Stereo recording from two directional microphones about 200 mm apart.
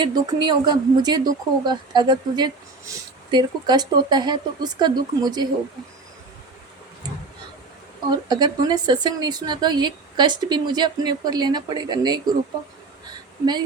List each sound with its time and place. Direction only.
0.0 s speech: 20° right (ahead or behind)
8.1 s speech: 20° right (ahead or behind)
13.4 s speech: 20° right (ahead or behind)